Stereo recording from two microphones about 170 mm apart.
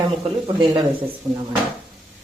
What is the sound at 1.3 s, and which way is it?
Speech, 20° right (ahead or behind).